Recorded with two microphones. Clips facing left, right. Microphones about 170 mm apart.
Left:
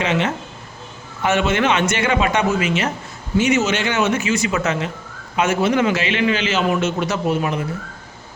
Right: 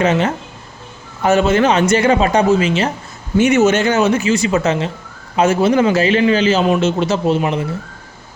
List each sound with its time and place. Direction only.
0.0 s a man's voice: 40° right (ahead or behind)
3.3 s a man's voice: 55° right (ahead or behind); by 7.6 s 30° right (ahead or behind)